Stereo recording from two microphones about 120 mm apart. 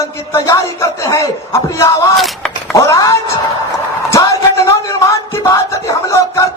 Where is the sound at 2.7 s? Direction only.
25° left (ahead or behind).